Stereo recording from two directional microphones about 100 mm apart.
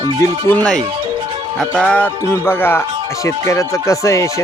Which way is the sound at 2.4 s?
20° left (ahead or behind).